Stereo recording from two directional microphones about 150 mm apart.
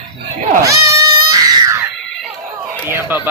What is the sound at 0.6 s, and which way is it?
Baby cry, 20° right (ahead or behind).